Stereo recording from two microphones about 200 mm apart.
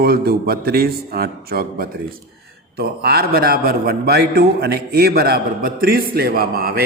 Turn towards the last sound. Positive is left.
turn(degrees=-50)  # may be behind; listen again after turning